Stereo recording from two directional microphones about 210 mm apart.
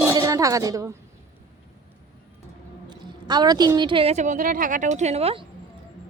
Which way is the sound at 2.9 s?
20° right (ahead or behind).